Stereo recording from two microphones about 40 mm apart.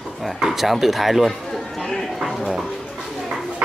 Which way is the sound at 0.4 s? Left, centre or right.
Centre.